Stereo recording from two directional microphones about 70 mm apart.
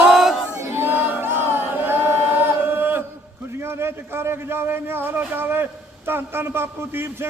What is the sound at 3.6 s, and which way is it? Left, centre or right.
A man's voice, right.